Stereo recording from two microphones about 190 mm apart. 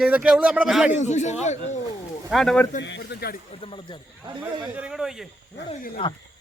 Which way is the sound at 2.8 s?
65° left (ahead or behind).